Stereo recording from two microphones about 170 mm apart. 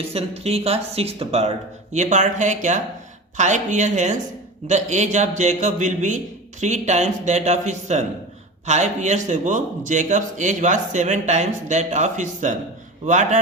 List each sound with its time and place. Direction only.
0.1 s a man's voice: 35° right (ahead or behind)